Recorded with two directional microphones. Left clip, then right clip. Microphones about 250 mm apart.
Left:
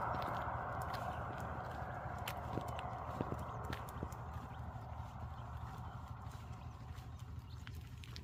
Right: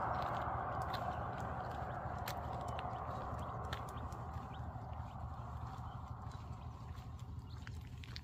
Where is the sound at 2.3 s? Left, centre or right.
Centre.